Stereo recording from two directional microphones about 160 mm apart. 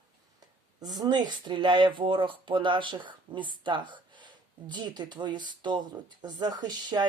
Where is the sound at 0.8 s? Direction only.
25° right (ahead or behind).